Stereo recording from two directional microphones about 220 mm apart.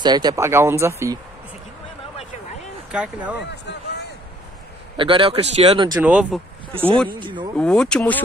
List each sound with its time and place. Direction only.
0.0 s speech: 20° right (ahead or behind)
2.9 s speech: 5° right (ahead or behind)
3.4 s speech: 50° left (ahead or behind)
4.9 s speech: 25° right (ahead or behind)
5.9 s speech: 5° right (ahead or behind)
7.1 s speech: 20° right (ahead or behind)
7.5 s speech: 5° left (ahead or behind)